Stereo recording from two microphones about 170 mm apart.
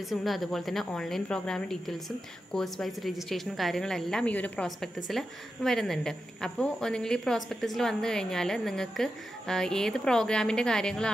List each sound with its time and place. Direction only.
0.1 s speech: centre (ahead or behind)